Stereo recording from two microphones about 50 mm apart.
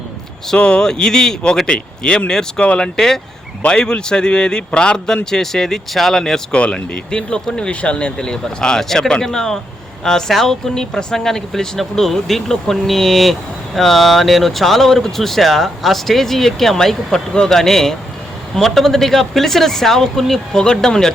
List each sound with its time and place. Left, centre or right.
0.5 s speech: left
6.5 s speech: left